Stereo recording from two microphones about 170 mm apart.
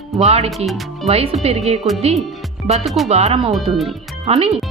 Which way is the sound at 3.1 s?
40° right (ahead or behind).